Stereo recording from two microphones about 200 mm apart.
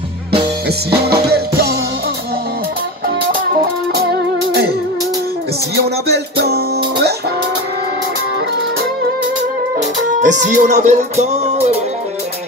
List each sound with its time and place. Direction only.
1.0 s music: 50° right (ahead or behind)
3.9 s music: 50° right (ahead or behind)
6.0 s music: 55° right (ahead or behind)
9.8 s music: 40° right (ahead or behind)